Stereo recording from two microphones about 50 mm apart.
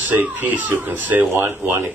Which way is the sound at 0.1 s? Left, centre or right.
Right.